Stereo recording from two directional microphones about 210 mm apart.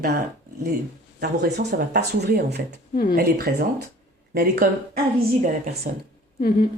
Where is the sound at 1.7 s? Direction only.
50° right (ahead or behind).